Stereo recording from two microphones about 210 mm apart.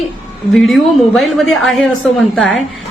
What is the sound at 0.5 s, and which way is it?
A woman's voice, centre (ahead or behind).